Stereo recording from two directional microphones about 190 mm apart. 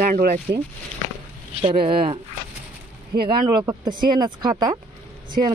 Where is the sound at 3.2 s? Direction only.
20° right (ahead or behind).